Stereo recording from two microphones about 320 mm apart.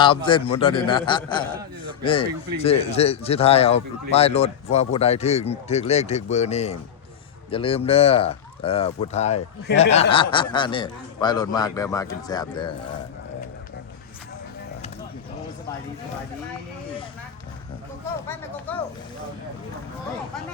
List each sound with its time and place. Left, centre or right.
0.0 s a man's voice: centre
18.3 s speech: centre